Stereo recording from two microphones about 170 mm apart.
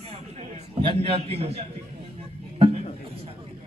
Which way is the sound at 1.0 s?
35° right (ahead or behind).